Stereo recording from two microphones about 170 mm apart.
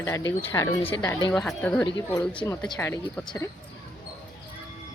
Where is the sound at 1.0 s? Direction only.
25° left (ahead or behind).